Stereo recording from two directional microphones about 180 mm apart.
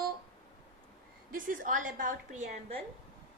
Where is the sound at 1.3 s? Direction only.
50° right (ahead or behind).